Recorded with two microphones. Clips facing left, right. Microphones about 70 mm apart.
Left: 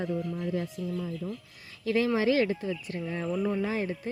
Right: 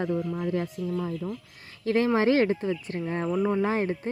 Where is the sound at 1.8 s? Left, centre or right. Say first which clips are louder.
Right 3 dB; right.